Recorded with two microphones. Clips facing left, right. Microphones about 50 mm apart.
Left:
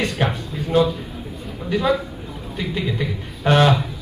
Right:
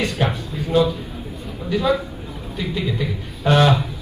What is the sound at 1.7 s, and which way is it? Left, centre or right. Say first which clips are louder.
Speech: even; left.